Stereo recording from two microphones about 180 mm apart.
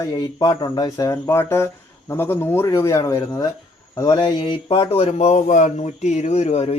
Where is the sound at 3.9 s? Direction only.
20° left (ahead or behind).